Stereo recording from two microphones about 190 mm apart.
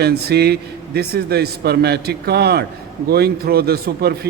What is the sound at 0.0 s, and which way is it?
Speech, 55° right (ahead or behind).